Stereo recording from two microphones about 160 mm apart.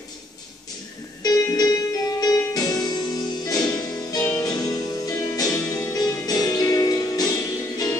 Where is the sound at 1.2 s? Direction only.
25° left (ahead or behind).